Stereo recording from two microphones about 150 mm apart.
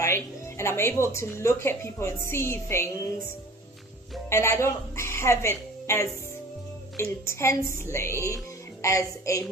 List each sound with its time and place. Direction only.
0.0 s a woman's voice: 20° left (ahead or behind)
4.3 s a woman's voice: 20° left (ahead or behind)